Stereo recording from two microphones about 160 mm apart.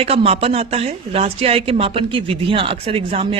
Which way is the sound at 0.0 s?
35° right (ahead or behind).